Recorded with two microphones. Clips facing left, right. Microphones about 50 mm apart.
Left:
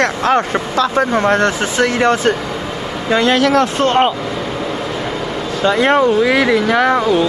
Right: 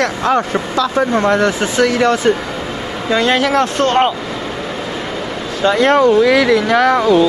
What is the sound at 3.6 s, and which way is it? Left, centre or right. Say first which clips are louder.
Speech: even; centre.